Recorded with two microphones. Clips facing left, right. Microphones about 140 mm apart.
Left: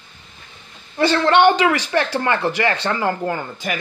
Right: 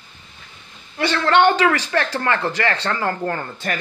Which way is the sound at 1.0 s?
25° left (ahead or behind).